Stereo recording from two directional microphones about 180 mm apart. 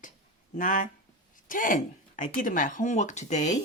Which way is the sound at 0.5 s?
45° left (ahead or behind).